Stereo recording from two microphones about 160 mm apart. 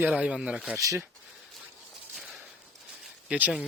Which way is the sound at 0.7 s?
20° right (ahead or behind).